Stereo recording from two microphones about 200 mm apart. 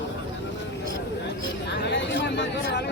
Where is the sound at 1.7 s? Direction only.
65° left (ahead or behind).